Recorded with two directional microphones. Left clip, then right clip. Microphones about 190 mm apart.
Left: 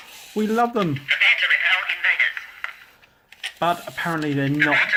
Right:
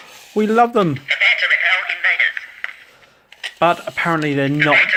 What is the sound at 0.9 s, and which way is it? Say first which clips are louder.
Radio: right 2 dB; 5° left (ahead or behind).